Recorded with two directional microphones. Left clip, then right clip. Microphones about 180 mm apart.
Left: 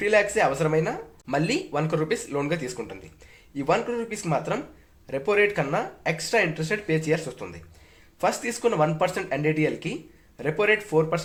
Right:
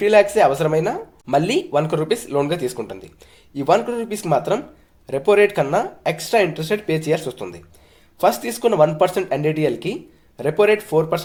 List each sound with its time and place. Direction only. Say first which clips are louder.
0.0 s speech: right 7 dB; 40° right (ahead or behind)